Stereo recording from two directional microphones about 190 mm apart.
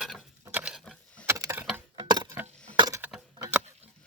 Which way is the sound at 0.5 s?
5° right (ahead or behind).